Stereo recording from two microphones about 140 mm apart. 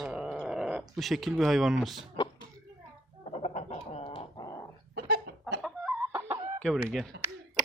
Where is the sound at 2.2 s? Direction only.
35° left (ahead or behind).